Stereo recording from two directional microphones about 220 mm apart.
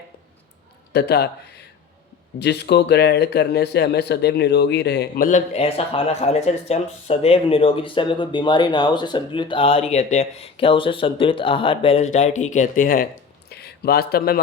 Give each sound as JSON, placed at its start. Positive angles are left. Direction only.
{"t": 0.9, "sound": "speech", "side_deg": 45}
{"t": 5.5, "sound": "speech", "side_deg": 25}